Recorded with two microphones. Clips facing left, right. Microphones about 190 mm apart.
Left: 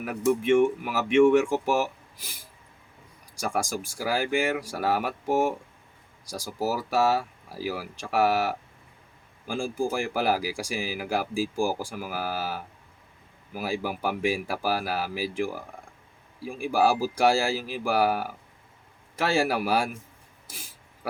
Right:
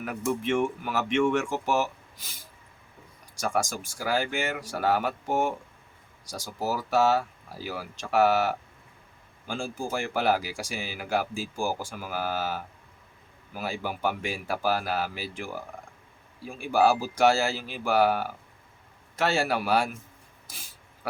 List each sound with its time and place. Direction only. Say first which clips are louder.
0.3 s speech: left 6 dB; 10° left (ahead or behind)
3.4 s speech: even; 10° left (ahead or behind)